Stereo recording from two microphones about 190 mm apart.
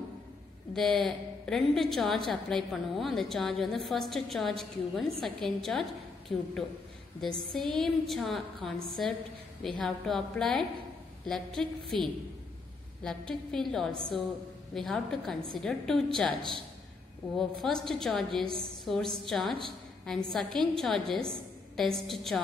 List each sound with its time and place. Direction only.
0.7 s a woman's voice: centre (ahead or behind)
17.4 s a woman's voice: centre (ahead or behind)